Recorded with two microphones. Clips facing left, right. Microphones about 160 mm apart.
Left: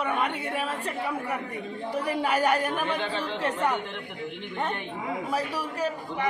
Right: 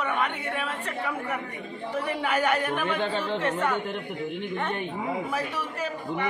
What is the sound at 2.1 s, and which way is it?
Speech, 35° left (ahead or behind).